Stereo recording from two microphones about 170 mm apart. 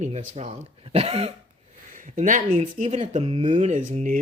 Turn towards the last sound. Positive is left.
turn(degrees=-50)  # may be behind; listen again after turning